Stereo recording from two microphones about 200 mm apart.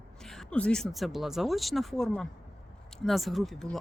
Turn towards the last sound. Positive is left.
turn(degrees=0)  # may be behind; listen again after turning